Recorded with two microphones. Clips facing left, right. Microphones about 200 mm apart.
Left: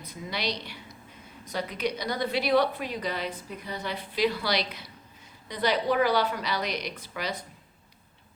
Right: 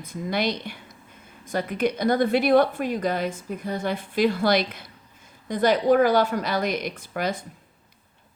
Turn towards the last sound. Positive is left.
turn(degrees=-50)  # may be behind; listen again after turning